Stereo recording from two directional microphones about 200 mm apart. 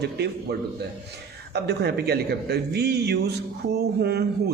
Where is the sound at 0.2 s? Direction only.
55° right (ahead or behind).